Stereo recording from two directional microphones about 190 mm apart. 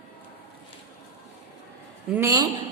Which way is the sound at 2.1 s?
15° right (ahead or behind).